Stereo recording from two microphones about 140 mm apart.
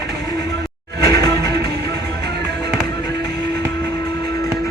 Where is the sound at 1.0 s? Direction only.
25° left (ahead or behind).